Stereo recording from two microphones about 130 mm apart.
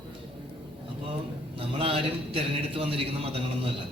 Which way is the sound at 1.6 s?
45° right (ahead or behind).